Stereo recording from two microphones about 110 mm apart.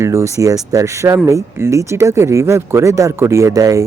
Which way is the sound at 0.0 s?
25° right (ahead or behind).